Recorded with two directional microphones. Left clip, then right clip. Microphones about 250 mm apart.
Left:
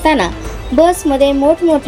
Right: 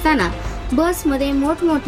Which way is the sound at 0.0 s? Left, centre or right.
Centre.